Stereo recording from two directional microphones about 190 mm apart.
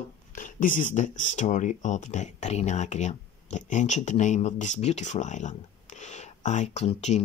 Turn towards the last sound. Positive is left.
turn(degrees=35)  # may be behind; listen again after turning